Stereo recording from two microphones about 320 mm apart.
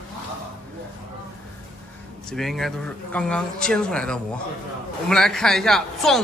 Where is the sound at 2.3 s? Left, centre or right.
Centre.